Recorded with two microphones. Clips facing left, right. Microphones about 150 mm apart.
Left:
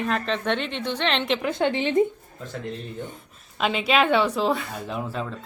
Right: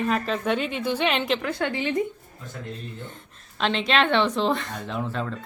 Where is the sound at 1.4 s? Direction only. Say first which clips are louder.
Left 3 dB; 20° left (ahead or behind).